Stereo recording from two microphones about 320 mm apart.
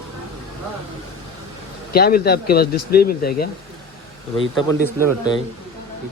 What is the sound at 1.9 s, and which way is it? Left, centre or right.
Speech, left.